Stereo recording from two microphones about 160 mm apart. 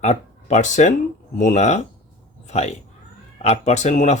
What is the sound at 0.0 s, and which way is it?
Speech, 45° left (ahead or behind).